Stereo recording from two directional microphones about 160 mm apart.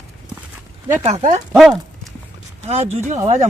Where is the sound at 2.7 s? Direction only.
40° right (ahead or behind).